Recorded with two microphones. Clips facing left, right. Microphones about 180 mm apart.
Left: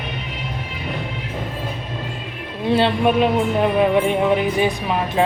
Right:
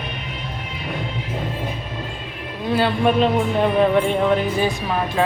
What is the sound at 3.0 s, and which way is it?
Speech, 10° left (ahead or behind).